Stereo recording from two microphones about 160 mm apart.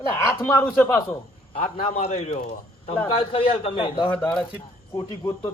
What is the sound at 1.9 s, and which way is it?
A man's voice, 45° left (ahead or behind).